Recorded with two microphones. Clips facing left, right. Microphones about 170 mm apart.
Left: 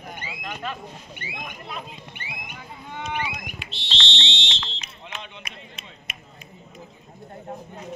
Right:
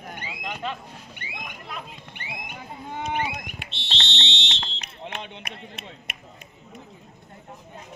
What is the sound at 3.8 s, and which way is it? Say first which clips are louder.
Fire alarm: left 1 dB; 55° right (ahead or behind).